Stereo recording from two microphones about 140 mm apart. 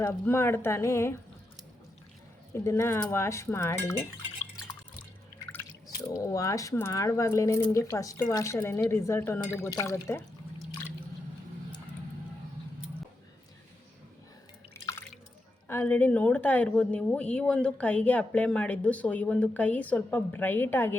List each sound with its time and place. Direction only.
0.3 s a woman's voice: 15° left (ahead or behind)
2.6 s speech: 20° left (ahead or behind)
6.1 s speech: 20° left (ahead or behind)
14.7 s drip: 15° left (ahead or behind)
15.6 s a woman's voice: 15° left (ahead or behind)